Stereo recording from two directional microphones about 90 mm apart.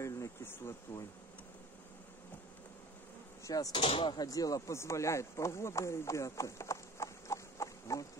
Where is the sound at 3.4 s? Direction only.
40° left (ahead or behind).